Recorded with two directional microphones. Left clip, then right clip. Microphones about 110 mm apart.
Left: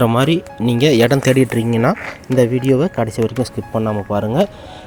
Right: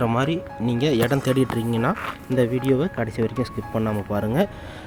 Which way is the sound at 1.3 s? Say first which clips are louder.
Left 7 dB; 40° left (ahead or behind).